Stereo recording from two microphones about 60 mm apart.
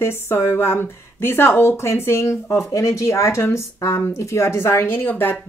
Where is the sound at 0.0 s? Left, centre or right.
Left.